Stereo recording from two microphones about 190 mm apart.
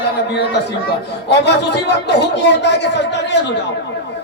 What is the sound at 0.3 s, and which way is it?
Speech, 60° left (ahead or behind).